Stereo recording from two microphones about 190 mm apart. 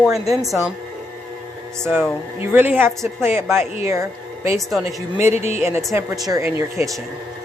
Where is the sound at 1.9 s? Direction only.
10° right (ahead or behind).